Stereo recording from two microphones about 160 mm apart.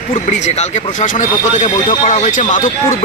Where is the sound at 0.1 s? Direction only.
50° left (ahead or behind).